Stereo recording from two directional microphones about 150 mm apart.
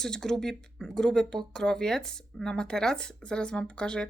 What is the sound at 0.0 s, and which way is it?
Speech, 5° left (ahead or behind).